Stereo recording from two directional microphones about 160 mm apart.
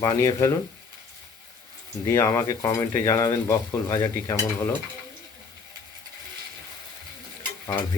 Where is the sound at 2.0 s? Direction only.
20° left (ahead or behind).